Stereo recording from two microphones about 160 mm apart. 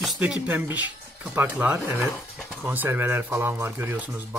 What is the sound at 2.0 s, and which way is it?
Speech, 5° left (ahead or behind).